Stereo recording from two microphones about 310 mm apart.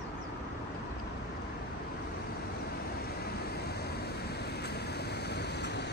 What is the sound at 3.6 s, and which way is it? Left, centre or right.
Vehicle, left.